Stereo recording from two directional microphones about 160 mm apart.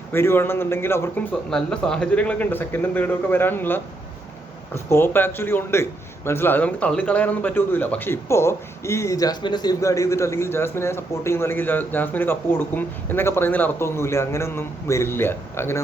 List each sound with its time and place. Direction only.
0.1 s a man's voice: 15° left (ahead or behind)